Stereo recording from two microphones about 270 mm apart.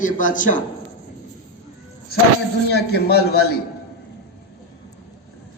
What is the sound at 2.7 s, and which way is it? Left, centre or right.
Speech, left.